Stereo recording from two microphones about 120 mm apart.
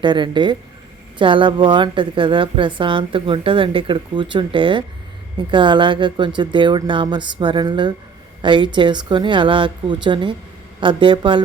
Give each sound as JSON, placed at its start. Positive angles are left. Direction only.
{"t": 0.0, "sound": "a woman's voice", "side_deg": -40}